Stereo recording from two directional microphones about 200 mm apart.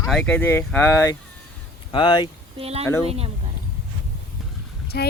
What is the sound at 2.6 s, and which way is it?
Speech, 30° right (ahead or behind).